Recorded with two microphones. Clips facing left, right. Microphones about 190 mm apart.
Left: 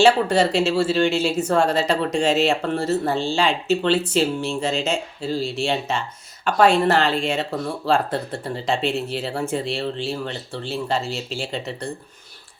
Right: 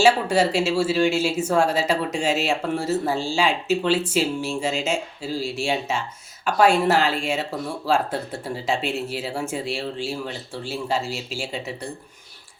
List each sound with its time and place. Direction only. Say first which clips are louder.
0.0 s speech: left 2 dB; 10° right (ahead or behind)